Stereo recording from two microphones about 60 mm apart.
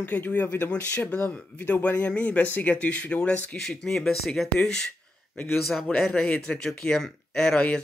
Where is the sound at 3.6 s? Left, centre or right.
Centre.